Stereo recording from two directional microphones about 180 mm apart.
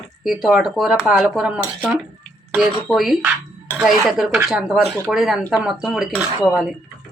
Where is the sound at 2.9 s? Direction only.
Centre (ahead or behind).